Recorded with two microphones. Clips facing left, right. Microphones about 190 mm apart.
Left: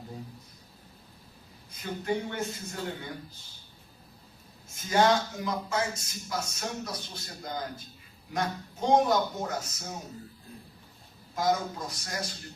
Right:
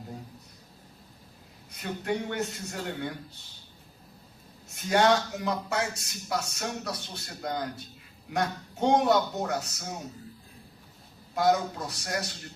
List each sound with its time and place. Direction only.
1.7 s speech: 70° right (ahead or behind)
4.7 s speech: 70° right (ahead or behind)
11.3 s speech: 70° right (ahead or behind)